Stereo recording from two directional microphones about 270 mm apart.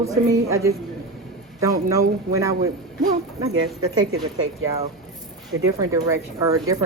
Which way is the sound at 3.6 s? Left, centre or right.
Right.